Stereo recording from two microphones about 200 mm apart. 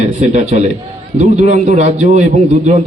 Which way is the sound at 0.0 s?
35° right (ahead or behind).